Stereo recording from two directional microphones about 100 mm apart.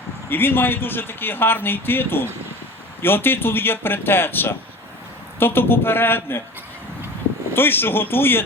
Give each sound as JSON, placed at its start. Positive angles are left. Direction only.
{"t": 0.3, "sound": "a man's voice", "side_deg": 20}
{"t": 7.5, "sound": "a man's voice", "side_deg": 20}